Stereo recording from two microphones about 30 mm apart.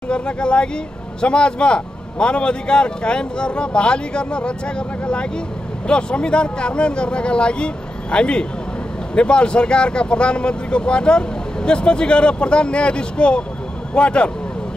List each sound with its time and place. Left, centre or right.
0.1 s a man's voice: left